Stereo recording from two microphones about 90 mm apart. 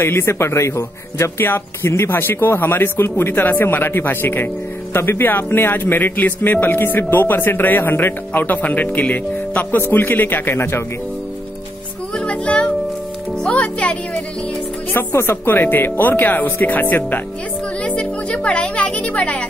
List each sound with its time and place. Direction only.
0.0 s speech: 25° left (ahead or behind)
12.2 s music: 10° left (ahead or behind)
14.9 s speech: 25° left (ahead or behind)
17.8 s music: 15° left (ahead or behind)